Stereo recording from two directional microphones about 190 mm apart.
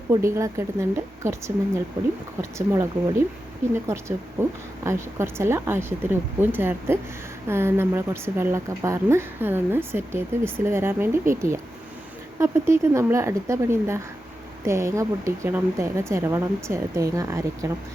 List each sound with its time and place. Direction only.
0.1 s a woman's voice: 15° right (ahead or behind)